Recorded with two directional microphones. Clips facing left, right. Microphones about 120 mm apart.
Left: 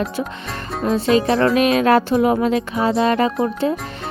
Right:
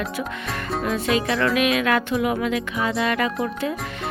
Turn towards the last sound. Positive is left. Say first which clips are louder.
# left 6 dB
turn(degrees=30)  # may be behind; listen again after turning